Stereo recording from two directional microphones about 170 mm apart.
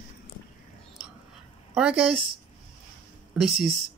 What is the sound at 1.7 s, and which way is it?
Speech, 5° right (ahead or behind).